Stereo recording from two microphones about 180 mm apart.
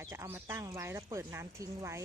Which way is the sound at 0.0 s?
15° right (ahead or behind).